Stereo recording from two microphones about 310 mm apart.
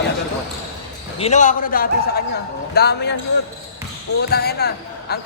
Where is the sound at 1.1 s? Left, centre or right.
Left.